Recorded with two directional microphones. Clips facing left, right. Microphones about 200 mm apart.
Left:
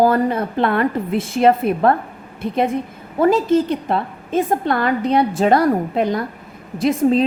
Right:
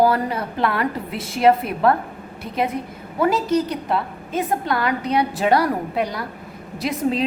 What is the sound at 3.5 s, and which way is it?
Speech, 30° left (ahead or behind).